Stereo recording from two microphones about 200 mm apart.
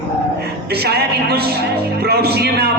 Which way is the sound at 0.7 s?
55° right (ahead or behind).